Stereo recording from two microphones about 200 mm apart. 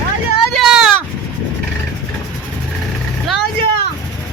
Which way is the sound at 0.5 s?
Centre (ahead or behind).